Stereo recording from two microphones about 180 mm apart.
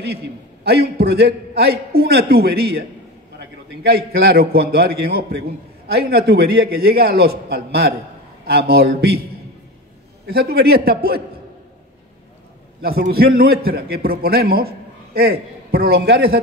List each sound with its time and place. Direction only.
0.7 s a man's voice: 65° right (ahead or behind)
10.2 s a man's voice: 60° right (ahead or behind)
12.8 s a man's voice: 55° right (ahead or behind)